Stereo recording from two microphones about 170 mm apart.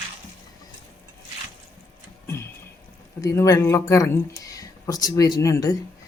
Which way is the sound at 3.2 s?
20° left (ahead or behind).